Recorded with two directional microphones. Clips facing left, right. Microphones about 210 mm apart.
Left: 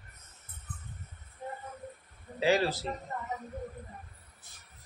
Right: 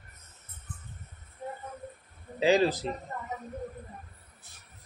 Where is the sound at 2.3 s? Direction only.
15° right (ahead or behind).